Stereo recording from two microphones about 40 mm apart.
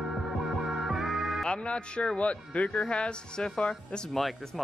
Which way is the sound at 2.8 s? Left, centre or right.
Left.